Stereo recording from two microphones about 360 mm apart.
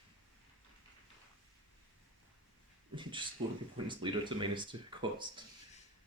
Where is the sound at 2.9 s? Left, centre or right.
Centre.